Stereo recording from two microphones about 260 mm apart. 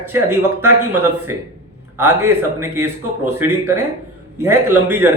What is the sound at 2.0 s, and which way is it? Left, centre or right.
Speech, right.